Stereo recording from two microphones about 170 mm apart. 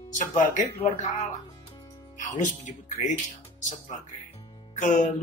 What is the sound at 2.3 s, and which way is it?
Speech, 45° left (ahead or behind).